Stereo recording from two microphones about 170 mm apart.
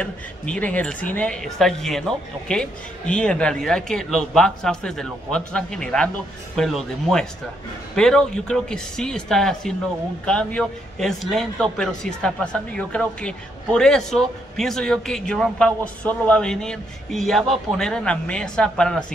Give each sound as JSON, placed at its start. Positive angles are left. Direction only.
{"t": 0.0, "sound": "a man's voice", "side_deg": 10}